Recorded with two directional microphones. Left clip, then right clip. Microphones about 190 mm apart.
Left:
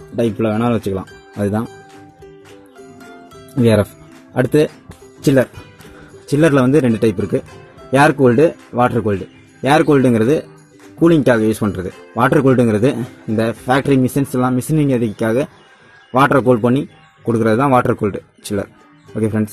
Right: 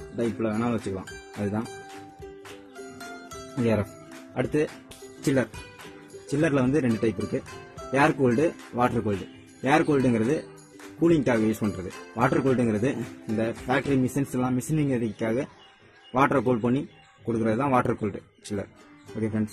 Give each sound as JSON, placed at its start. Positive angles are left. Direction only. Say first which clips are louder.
{"t": 0.4, "sound": "speech", "louder": "left 11 dB", "side_deg": 25}
{"t": 4.3, "sound": "speech", "louder": "left 12 dB", "side_deg": 30}
{"t": 5.2, "sound": "speech", "louder": "left 11 dB", "side_deg": 15}